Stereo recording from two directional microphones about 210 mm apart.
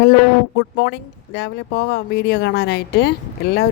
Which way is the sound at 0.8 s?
55° left (ahead or behind).